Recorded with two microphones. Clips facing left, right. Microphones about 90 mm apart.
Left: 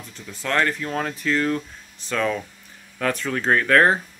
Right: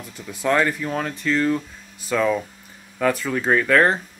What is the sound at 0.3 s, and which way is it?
Speech, 15° right (ahead or behind).